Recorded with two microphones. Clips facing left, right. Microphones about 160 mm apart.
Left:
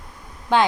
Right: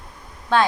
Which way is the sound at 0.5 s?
15° left (ahead or behind).